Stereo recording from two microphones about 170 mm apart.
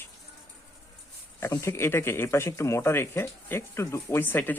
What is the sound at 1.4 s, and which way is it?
Speech, 15° left (ahead or behind).